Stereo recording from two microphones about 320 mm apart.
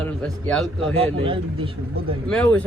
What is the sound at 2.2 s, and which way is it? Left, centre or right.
Speech, centre.